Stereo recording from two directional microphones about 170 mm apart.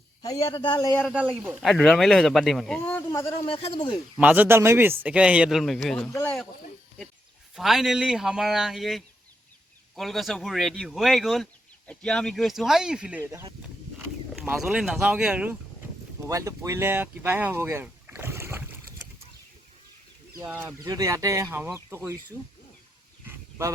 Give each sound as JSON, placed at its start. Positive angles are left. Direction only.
{"t": 0.3, "sound": "speech", "side_deg": 30}
{"t": 1.1, "sound": "speech", "side_deg": -5}
{"t": 3.2, "sound": "speech", "side_deg": 35}
{"t": 4.2, "sound": "speech", "side_deg": -10}
{"t": 6.1, "sound": "speech", "side_deg": 15}
{"t": 7.5, "sound": "speech", "side_deg": 0}
{"t": 13.6, "sound": "a sound", "side_deg": -10}
{"t": 14.5, "sound": "speech", "side_deg": -5}
{"t": 16.3, "sound": "speech", "side_deg": -20}
{"t": 20.3, "sound": "speech", "side_deg": -15}
{"t": 23.2, "sound": "a sound", "side_deg": -15}